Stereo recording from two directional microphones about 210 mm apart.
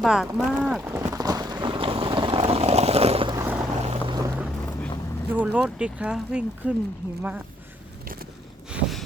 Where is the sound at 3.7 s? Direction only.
30° right (ahead or behind).